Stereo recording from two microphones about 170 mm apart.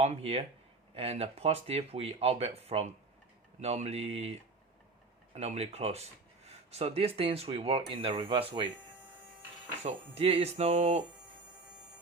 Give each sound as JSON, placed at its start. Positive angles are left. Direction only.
{"t": 0.0, "sound": "speech", "side_deg": -40}
{"t": 9.8, "sound": "speech", "side_deg": -35}